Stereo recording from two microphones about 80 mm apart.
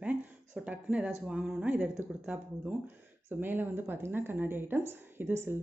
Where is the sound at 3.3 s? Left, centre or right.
Right.